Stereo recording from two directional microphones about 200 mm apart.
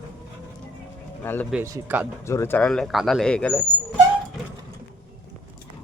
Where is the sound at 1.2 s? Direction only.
10° left (ahead or behind).